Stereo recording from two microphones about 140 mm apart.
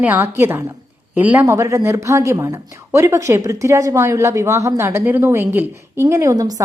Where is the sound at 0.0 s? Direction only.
15° right (ahead or behind).